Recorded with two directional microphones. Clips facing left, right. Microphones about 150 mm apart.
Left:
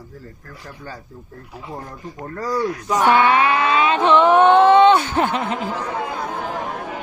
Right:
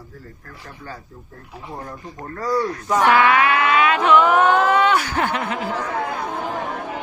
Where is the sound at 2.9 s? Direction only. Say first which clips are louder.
Even; 20° left (ahead or behind).